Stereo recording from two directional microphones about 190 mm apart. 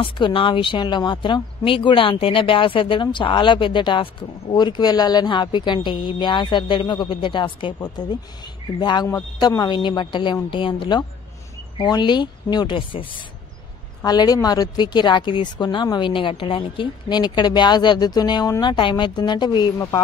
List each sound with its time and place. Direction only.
0.0 s speech: 25° left (ahead or behind)